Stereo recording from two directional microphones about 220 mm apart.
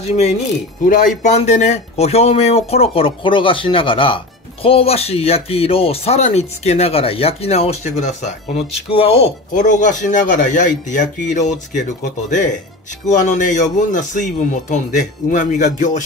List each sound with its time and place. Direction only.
0.0 s speech: 30° left (ahead or behind)